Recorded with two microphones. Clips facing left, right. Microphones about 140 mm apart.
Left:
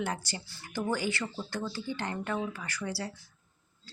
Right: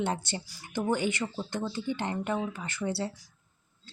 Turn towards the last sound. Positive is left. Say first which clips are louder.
# right 4 dB
turn(degrees=-25)  # may be behind; listen again after turning